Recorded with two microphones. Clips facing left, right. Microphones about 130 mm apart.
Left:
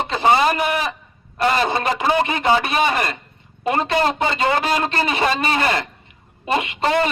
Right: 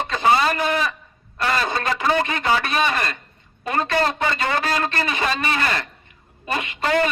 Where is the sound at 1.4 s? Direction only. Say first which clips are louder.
Left 4 dB; 25° left (ahead or behind).